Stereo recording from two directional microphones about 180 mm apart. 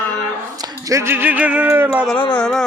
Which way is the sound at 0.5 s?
20° right (ahead or behind).